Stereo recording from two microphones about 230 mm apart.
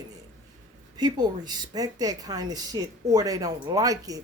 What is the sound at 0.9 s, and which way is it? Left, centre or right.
A woman's voice, centre.